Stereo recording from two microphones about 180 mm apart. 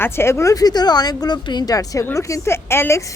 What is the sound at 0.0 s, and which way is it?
Speech, 15° left (ahead or behind).